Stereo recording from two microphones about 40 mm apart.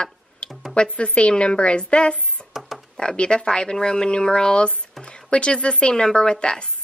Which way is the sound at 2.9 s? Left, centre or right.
Left.